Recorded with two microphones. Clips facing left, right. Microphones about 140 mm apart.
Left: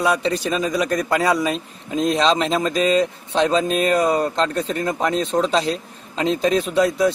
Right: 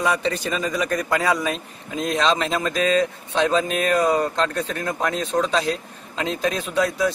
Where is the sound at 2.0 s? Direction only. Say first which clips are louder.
Left 3 dB; 25° left (ahead or behind).